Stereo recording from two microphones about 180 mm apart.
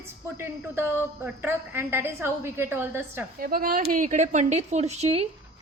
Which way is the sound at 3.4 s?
55° right (ahead or behind).